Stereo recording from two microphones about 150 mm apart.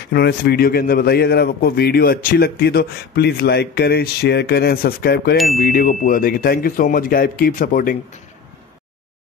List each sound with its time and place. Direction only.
0.1 s a man's voice: 90° left
5.6 s speech: 75° left (ahead or behind)